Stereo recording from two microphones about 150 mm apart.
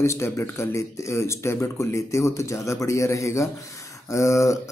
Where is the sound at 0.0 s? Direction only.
20° left (ahead or behind).